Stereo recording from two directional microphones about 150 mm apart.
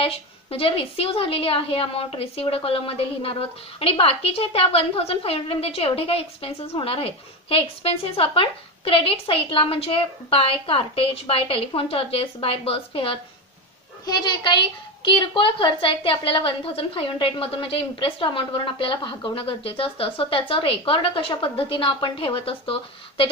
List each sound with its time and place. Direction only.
0.0 s a woman's voice: 40° left (ahead or behind)